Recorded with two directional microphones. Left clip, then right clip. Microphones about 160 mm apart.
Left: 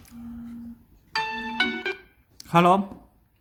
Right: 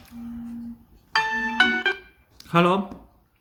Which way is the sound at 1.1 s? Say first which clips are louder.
Right 5 dB; 10° left (ahead or behind).